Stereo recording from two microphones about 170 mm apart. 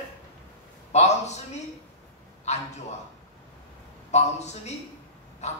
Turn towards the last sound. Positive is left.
turn(degrees=40)  # may be behind; listen again after turning